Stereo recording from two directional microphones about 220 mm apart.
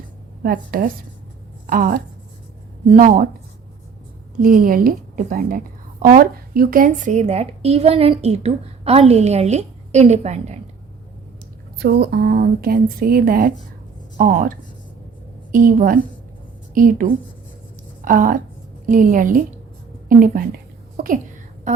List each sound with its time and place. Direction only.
0.4 s a woman's voice: 40° right (ahead or behind)
4.4 s a woman's voice: 40° right (ahead or behind)
11.8 s a woman's voice: 45° right (ahead or behind)
20.1 s a sound: 40° right (ahead or behind)